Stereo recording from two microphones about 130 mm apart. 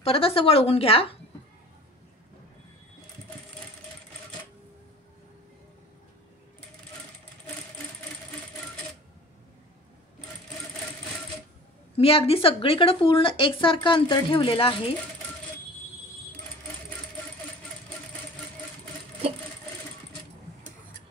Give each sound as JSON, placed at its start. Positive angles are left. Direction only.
{"t": 0.0, "sound": "speech", "side_deg": 45}
{"t": 12.0, "sound": "speech", "side_deg": 45}